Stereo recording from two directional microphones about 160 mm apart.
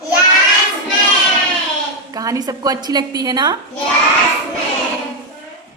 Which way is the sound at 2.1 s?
20° right (ahead or behind).